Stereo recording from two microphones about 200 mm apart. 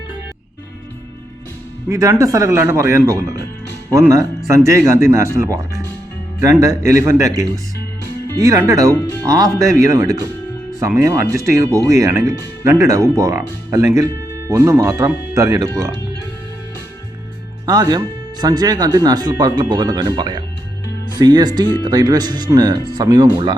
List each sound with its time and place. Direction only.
1.9 s speech: 15° right (ahead or behind)
17.7 s speech: 20° right (ahead or behind)